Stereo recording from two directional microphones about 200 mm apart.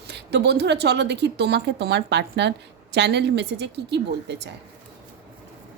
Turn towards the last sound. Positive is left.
turn(degrees=-60)  # may be behind; listen again after turning